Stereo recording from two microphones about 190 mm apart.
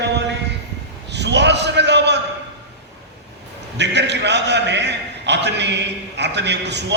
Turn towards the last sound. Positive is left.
turn(degrees=-65)  # may be behind; listen again after turning